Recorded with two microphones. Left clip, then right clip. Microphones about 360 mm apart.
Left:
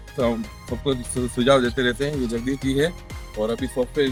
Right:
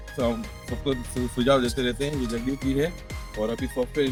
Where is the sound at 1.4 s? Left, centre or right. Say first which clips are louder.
Left 4 dB; right.